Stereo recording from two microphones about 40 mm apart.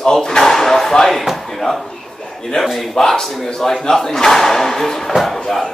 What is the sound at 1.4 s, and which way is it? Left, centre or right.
Chop, centre.